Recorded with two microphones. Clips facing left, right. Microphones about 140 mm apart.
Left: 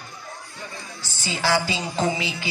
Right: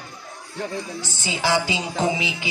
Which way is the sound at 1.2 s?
20° right (ahead or behind).